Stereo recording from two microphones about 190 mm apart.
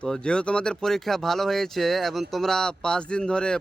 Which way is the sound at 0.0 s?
5° left (ahead or behind).